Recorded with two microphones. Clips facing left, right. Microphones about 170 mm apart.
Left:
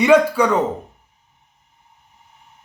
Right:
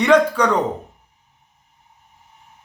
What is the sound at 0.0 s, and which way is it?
Speech, 10° left (ahead or behind).